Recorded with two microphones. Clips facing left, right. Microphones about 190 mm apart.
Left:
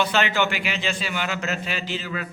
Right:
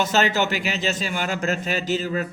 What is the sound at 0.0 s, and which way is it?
A man's voice, 40° right (ahead or behind).